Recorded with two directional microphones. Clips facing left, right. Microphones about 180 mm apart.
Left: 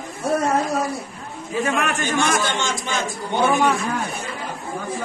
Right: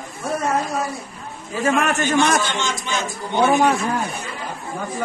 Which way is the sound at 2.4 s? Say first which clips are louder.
Left 1 dB; 50° left (ahead or behind).